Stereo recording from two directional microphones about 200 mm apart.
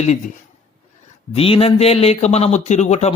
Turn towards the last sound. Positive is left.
turn(degrees=35)  # may be behind; listen again after turning